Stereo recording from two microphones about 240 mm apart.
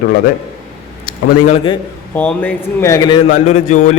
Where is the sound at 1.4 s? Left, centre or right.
Left.